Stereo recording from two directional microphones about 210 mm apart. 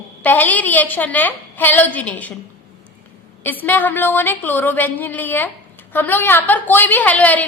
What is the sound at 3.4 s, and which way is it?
A woman's voice, 10° left (ahead or behind).